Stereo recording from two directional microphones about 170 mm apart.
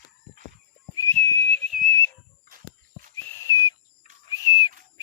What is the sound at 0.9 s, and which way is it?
Whistle, 20° left (ahead or behind).